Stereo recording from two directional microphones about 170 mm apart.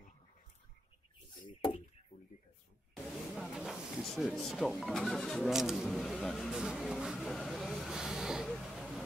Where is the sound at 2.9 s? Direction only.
Centre (ahead or behind).